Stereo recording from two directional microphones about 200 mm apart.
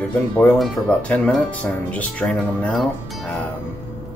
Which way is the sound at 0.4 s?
5° left (ahead or behind).